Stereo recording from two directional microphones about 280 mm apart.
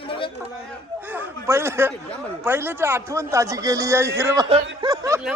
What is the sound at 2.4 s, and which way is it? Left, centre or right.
A man's voice, centre.